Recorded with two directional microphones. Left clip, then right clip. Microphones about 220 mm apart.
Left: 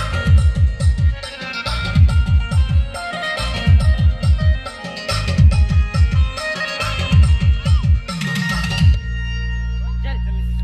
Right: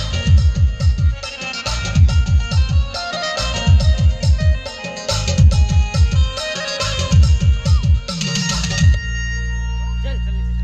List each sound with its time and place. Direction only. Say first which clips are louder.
0.0 s music: left 1 dB; 35° left (ahead or behind); by 3.4 s 15° left (ahead or behind)
3.4 s music: right 2 dB; 5° right (ahead or behind); by 8.6 s 35° right (ahead or behind)
8.6 s music: right 1 dB; 10° right (ahead or behind)